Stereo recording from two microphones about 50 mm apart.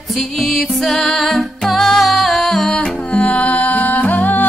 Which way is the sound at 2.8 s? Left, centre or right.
Left.